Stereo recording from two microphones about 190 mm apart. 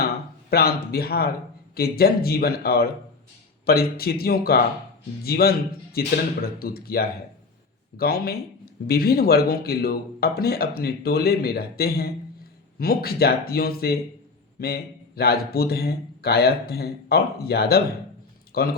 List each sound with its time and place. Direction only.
0.5 s a man's voice: 55° left (ahead or behind)